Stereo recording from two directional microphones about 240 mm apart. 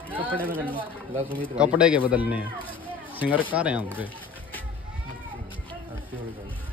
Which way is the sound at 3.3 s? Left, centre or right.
Centre.